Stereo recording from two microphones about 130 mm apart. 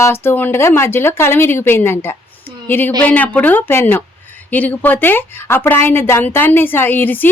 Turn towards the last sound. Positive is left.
turn(degrees=15)  # may be behind; listen again after turning